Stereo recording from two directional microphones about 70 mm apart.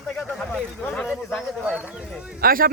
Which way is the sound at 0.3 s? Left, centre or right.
Centre.